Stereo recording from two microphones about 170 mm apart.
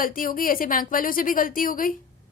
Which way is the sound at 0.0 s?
55° left (ahead or behind).